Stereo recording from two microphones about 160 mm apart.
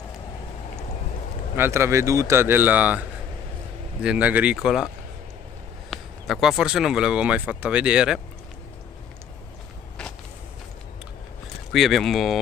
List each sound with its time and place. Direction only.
1.6 s speech: 15° right (ahead or behind)
5.9 s speech: centre (ahead or behind)
11.7 s speech: centre (ahead or behind)